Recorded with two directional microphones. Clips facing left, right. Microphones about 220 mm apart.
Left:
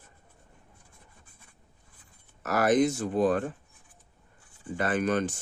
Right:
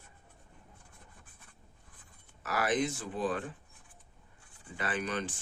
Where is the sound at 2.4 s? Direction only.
45° left (ahead or behind).